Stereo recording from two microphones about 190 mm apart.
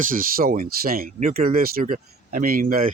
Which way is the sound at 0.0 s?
50° right (ahead or behind).